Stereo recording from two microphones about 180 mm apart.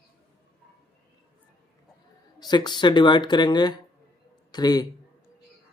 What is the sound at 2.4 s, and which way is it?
A man's voice, 25° left (ahead or behind).